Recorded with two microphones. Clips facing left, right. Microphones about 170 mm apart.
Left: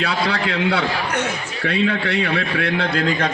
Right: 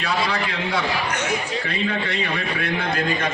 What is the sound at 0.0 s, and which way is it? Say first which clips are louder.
A man's voice: left 2 dB; 75° left (ahead or behind).